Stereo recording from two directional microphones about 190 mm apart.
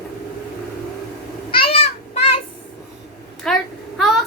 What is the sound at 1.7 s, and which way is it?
Children playing, 30° left (ahead or behind).